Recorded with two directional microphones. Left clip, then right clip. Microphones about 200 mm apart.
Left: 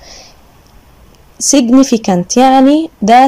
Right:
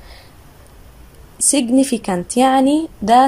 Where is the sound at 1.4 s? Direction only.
20° left (ahead or behind).